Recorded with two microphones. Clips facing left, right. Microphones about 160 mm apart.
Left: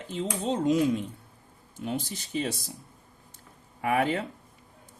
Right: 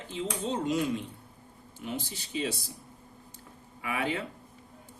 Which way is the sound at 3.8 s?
50° left (ahead or behind).